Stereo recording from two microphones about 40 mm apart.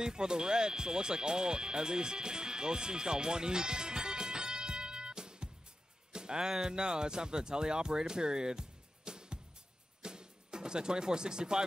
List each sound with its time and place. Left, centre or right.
0.0 s speech: centre
10.0 s music: centre